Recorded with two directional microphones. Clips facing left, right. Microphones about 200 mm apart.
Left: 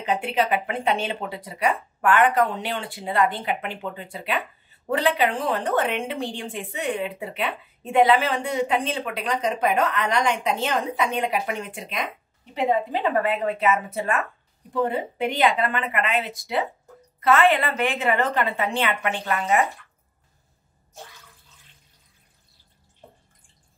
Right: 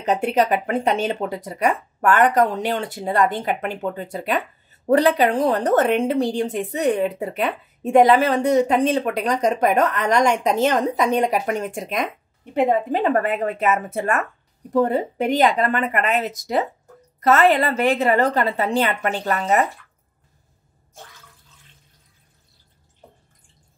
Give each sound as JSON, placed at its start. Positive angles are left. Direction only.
{"t": 0.0, "sound": "a woman's voice", "side_deg": -45}